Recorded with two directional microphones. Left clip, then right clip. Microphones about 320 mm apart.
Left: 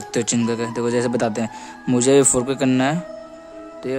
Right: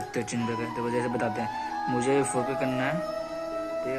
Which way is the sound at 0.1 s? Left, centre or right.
Left.